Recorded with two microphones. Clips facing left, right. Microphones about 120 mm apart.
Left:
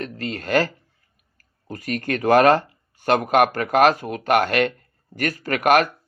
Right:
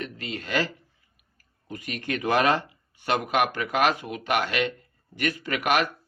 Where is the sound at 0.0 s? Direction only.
45° left (ahead or behind).